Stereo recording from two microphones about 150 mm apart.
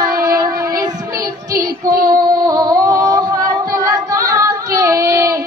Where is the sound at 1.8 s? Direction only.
25° right (ahead or behind).